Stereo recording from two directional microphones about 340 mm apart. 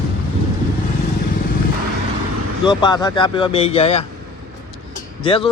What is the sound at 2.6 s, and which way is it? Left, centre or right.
Speech, centre.